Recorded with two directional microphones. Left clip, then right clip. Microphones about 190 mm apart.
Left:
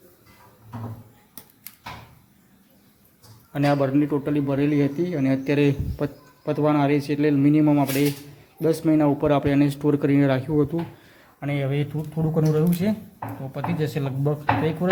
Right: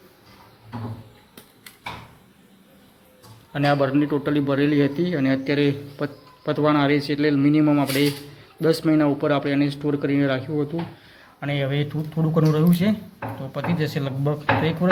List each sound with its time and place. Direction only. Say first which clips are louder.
3.5 s a man's voice: right 1 dB; 15° left (ahead or behind)